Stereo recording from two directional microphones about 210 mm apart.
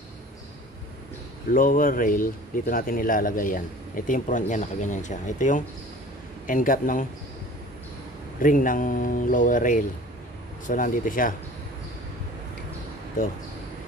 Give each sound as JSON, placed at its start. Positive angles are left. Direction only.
{"t": 1.5, "sound": "a man's voice", "side_deg": 40}
{"t": 8.4, "sound": "a man's voice", "side_deg": 40}